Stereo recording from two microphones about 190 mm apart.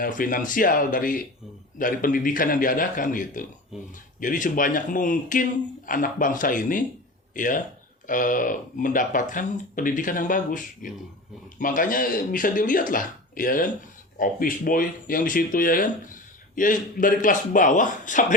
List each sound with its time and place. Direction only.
0.0 s speech: 45° left (ahead or behind)